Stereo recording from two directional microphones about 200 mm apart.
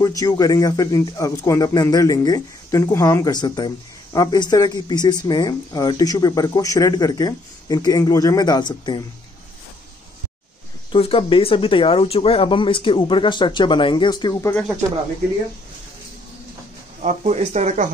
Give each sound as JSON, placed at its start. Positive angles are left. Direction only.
{"t": 0.0, "sound": "speech", "side_deg": 20}
{"t": 10.9, "sound": "speech", "side_deg": 25}
{"t": 17.0, "sound": "speech", "side_deg": -35}